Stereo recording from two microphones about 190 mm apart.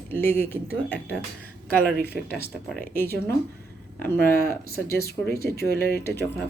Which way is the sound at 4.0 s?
15° left (ahead or behind).